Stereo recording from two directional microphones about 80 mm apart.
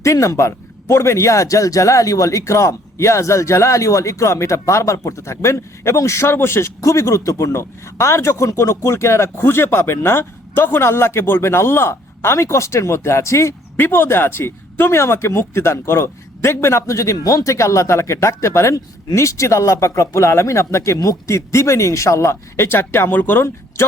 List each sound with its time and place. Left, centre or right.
0.0 s a man's voice: left